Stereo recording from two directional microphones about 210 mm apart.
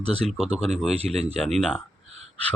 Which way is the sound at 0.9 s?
30° right (ahead or behind).